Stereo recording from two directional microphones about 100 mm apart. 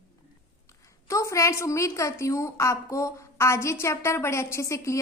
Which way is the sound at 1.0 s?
30° left (ahead or behind).